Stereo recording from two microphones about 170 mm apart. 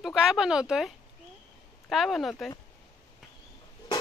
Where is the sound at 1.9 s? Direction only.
Centre (ahead or behind).